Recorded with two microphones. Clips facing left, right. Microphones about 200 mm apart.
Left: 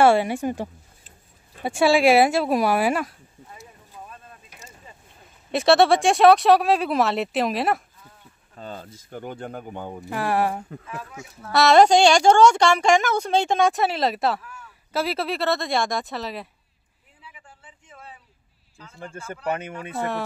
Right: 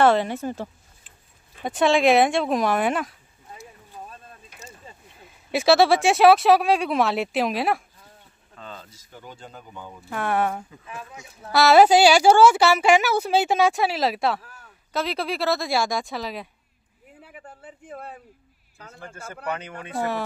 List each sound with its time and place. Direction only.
0.0 s a woman's voice: 10° left (ahead or behind)
5.5 s a woman's voice: centre (ahead or behind)
8.5 s speech: 45° left (ahead or behind)
10.1 s a woman's voice: 5° left (ahead or behind)
10.7 s speech: 60° left (ahead or behind)
11.5 s a woman's voice: 5° right (ahead or behind)
14.4 s a sound: 35° right (ahead or behind)
14.9 s a woman's voice: 5° left (ahead or behind)
17.2 s a sound: 55° right (ahead or behind)